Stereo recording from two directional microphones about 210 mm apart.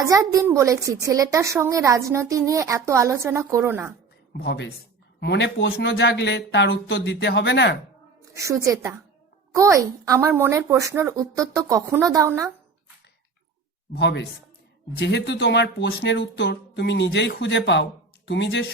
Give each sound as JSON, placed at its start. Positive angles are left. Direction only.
{"t": 0.0, "sound": "a woman's voice", "side_deg": -15}
{"t": 4.4, "sound": "speech", "side_deg": 55}
{"t": 5.7, "sound": "speech", "side_deg": 50}
{"t": 8.2, "sound": "a woman's voice", "side_deg": -15}
{"t": 13.9, "sound": "speech", "side_deg": 55}